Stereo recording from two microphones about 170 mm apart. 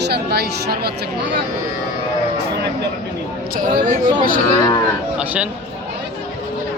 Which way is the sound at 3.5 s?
55° right (ahead or behind).